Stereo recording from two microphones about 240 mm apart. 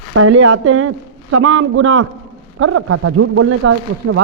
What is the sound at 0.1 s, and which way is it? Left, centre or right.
A woman's voice, right.